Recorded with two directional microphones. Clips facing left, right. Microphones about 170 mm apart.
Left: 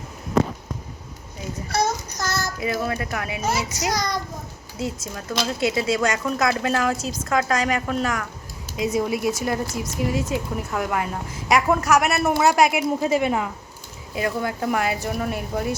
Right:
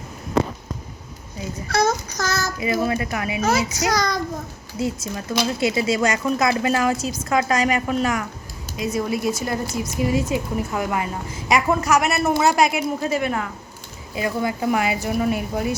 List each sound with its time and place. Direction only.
1.7 s child singing: 90° right
2.6 s a woman's voice: 5° right (ahead or behind)
3.8 s child singing: 90° right
4.8 s a woman's voice: 5° right (ahead or behind)
8.7 s speech: 20° left (ahead or behind)
10.0 s a woman's voice: 5° right (ahead or behind); by 13.5 s 15° left (ahead or behind)
14.2 s a woman's voice: 5° right (ahead or behind)